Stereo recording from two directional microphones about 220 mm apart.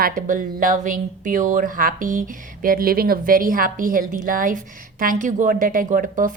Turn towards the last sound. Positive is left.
turn(degrees=-35)  # may be behind; listen again after turning